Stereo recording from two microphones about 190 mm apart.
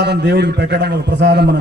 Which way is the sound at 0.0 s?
60° right (ahead or behind).